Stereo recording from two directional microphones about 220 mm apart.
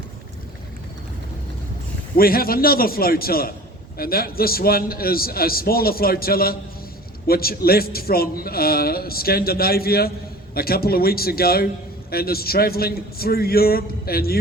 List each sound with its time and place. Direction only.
2.1 s a man's voice: 40° left (ahead or behind)